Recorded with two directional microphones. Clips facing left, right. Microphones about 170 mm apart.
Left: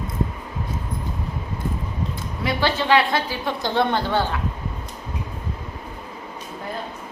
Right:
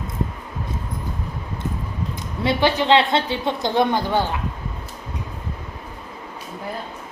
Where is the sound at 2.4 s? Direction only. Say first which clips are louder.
Right 4 dB; 25° right (ahead or behind).